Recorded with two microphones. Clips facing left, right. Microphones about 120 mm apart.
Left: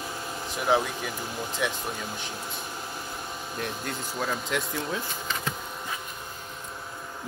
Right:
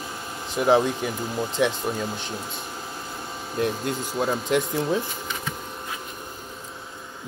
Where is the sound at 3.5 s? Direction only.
20° right (ahead or behind).